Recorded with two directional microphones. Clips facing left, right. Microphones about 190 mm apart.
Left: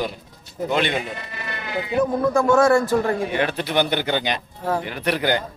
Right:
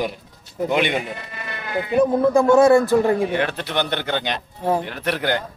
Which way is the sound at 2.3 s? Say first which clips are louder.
Right 3 dB; 20° right (ahead or behind).